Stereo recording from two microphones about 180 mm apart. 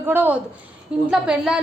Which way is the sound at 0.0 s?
10° right (ahead or behind).